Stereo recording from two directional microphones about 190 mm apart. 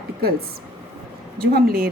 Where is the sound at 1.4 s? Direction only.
50° right (ahead or behind).